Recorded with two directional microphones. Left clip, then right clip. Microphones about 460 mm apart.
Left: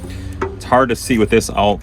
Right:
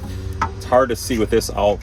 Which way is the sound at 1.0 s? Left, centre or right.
Left.